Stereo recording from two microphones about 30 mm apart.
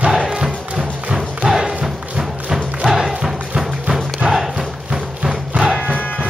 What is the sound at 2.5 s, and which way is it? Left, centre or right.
Music, centre.